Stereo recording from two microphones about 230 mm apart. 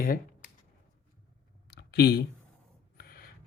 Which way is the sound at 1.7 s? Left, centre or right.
Left.